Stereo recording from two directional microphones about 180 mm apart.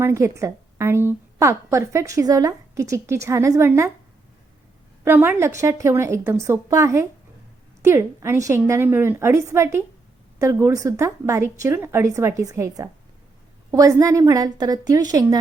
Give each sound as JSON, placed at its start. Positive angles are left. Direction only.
{"t": 0.0, "sound": "a woman's voice", "side_deg": -15}
{"t": 5.0, "sound": "a woman's voice", "side_deg": -10}